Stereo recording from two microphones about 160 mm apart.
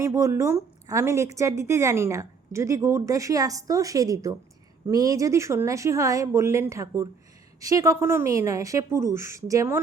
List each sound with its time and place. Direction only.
0.0 s a woman's voice: 20° right (ahead or behind)